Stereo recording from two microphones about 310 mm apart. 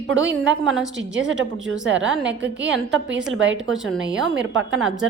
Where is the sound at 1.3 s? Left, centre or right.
Right.